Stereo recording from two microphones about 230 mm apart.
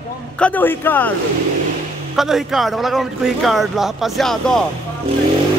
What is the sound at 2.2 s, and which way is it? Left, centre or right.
Speech, centre.